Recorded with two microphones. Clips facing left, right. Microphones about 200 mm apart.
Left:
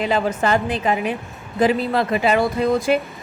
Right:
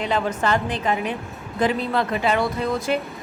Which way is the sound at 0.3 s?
10° left (ahead or behind).